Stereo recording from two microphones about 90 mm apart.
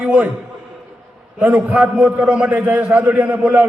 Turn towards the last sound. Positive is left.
turn(degrees=-15)  # may be behind; listen again after turning